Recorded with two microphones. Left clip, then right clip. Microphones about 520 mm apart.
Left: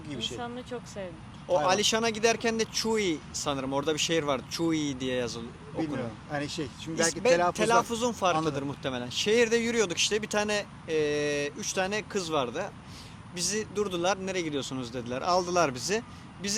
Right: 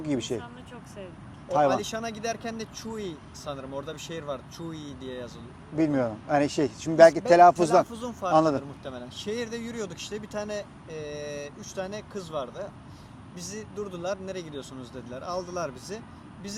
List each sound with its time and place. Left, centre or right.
0.1 s speech: right
1.6 s speech: left
6.3 s speech: right
7.5 s speech: left
8.8 s speech: left
13.3 s speech: left